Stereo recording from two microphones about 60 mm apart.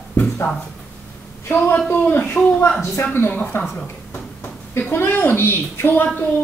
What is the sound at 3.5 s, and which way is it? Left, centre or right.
Speech, left.